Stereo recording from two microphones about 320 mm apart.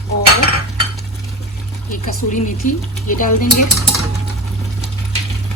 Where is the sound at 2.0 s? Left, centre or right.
Left.